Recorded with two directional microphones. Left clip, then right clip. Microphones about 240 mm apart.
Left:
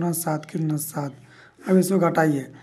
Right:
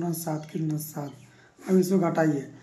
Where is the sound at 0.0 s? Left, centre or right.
Left.